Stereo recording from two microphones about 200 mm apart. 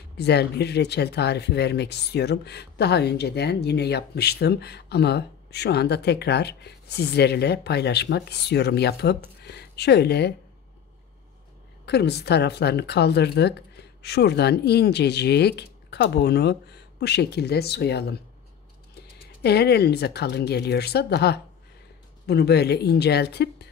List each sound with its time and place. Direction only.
0.2 s speech: 55° left (ahead or behind)
11.8 s speech: 55° left (ahead or behind)
19.4 s speech: 55° left (ahead or behind)